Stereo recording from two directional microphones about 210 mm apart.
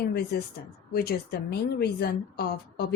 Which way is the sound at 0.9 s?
45° left (ahead or behind).